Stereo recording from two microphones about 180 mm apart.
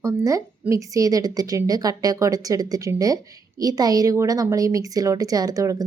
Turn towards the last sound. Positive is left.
turn(degrees=-20)  # may be behind; listen again after turning